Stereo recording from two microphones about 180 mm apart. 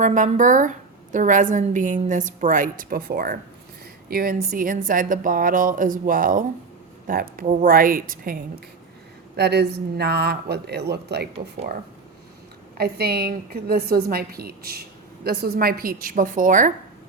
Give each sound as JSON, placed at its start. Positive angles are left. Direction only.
{"t": 0.0, "sound": "a woman's voice", "side_deg": -45}
{"t": 9.3, "sound": "speech", "side_deg": -65}
{"t": 12.7, "sound": "a woman's voice", "side_deg": -60}